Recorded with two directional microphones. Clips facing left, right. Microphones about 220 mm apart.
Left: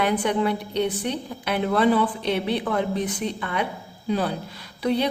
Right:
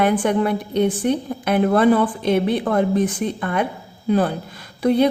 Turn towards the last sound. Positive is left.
turn(degrees=-50)  # may be behind; listen again after turning